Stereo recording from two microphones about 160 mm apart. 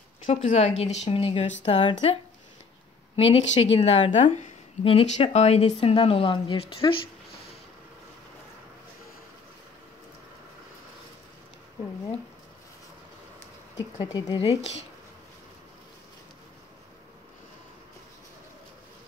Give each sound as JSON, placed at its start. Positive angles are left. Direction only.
{"t": 0.3, "sound": "a woman's voice", "side_deg": 45}
{"t": 3.2, "sound": "a woman's voice", "side_deg": 40}
{"t": 14.1, "sound": "speech", "side_deg": 25}